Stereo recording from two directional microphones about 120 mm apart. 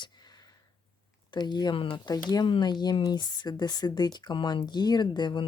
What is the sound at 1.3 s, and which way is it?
Speech, 35° left (ahead or behind).